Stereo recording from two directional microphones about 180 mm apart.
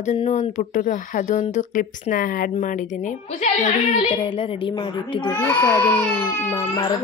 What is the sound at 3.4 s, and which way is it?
A woman's voice, 35° left (ahead or behind).